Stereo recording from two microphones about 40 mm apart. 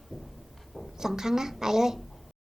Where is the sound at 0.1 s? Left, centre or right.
Centre.